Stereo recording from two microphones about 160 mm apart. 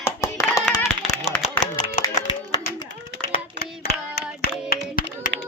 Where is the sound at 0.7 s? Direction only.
15° left (ahead or behind).